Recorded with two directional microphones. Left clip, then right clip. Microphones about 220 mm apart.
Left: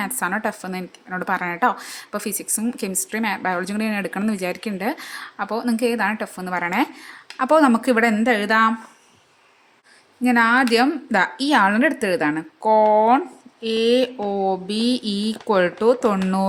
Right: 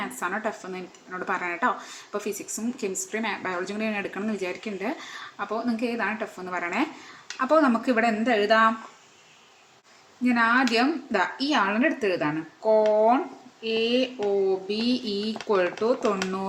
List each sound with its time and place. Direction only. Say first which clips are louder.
0.0 s a woman's voice: left 6 dB; 40° left (ahead or behind)
10.2 s a woman's voice: left 5 dB; 40° left (ahead or behind)